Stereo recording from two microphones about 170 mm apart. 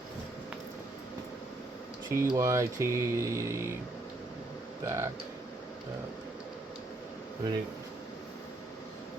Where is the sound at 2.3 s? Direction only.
20° right (ahead or behind).